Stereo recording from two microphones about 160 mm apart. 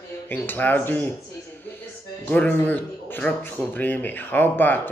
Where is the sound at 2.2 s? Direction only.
10° left (ahead or behind).